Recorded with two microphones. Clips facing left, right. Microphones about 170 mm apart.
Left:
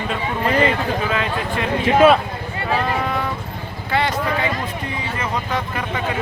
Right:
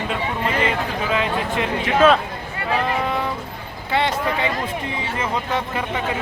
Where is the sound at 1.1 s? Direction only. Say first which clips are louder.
Right 1 dB; 20° right (ahead or behind).